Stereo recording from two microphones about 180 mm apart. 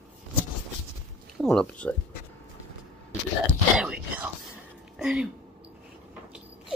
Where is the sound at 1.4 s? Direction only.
5° left (ahead or behind).